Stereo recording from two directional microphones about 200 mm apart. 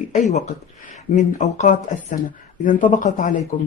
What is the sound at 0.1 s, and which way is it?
Speech, 35° left (ahead or behind).